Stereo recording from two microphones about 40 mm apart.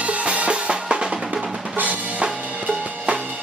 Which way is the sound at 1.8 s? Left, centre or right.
Right.